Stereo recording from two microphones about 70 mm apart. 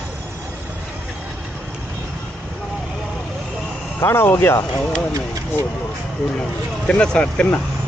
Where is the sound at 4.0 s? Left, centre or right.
Left.